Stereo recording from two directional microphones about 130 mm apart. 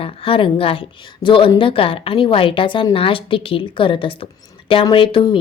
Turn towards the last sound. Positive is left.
turn(degrees=35)  # may be behind; listen again after turning